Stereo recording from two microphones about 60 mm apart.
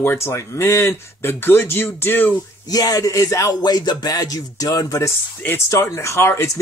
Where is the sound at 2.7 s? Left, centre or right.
Left.